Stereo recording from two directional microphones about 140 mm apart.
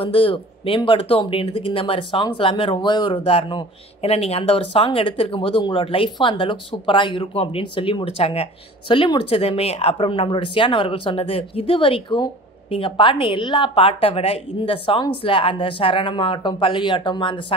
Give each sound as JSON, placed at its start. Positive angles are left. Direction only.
{"t": 0.0, "sound": "speech", "side_deg": 40}